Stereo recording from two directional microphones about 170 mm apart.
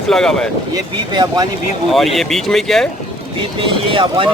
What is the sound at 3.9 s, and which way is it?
Speech, 30° right (ahead or behind).